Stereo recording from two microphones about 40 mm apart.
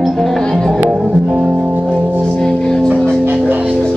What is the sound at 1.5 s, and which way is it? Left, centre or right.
Music, right.